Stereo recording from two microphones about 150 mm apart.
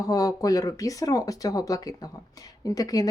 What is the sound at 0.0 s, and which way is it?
Speech, 25° left (ahead or behind).